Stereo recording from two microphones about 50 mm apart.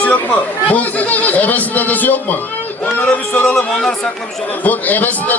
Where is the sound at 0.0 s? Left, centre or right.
Left.